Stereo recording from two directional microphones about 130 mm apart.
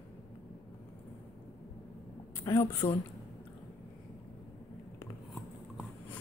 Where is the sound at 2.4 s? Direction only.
20° left (ahead or behind).